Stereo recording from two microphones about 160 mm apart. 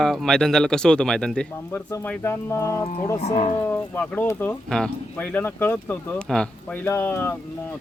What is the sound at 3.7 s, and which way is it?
Speech, 10° left (ahead or behind).